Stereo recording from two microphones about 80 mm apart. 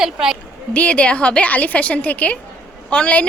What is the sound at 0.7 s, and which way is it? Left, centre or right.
A woman's voice, centre.